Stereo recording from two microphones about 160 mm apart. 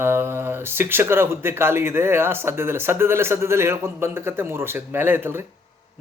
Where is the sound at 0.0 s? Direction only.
15° right (ahead or behind).